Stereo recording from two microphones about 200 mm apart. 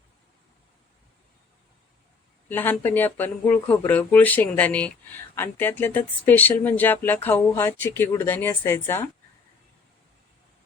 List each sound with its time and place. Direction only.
2.5 s speech: 10° left (ahead or behind)